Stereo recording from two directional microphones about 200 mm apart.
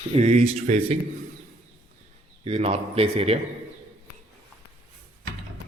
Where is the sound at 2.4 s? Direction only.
30° right (ahead or behind).